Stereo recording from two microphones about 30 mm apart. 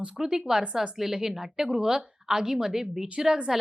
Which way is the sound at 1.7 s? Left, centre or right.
Right.